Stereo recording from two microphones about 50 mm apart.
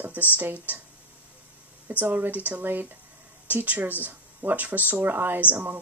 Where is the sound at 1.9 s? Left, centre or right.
Right.